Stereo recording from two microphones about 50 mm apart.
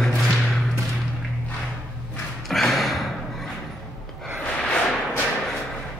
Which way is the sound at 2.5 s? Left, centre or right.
Centre.